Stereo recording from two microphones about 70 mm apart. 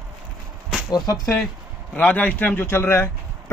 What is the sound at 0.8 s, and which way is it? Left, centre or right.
Speech, left.